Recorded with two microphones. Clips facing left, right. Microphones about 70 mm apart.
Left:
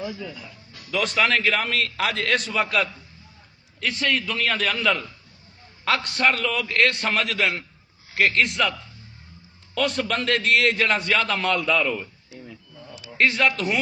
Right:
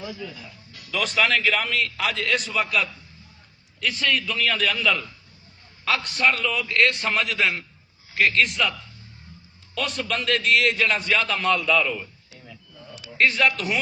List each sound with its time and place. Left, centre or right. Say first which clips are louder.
0.0 s speech: left 3 dB; centre
0.9 s a man's voice: left 1 dB; left
9.7 s a man's voice: left 3 dB; left
13.6 s a man's voice: left 2 dB; left